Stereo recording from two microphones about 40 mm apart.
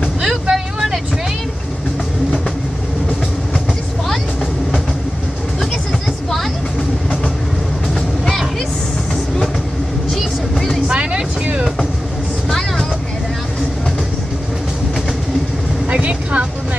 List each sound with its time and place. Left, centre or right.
0.3 s vehicle: centre
7.9 s vehicle: centre
10.1 s vehicle: centre
10.9 s vehicle: right
15.9 s vehicle: right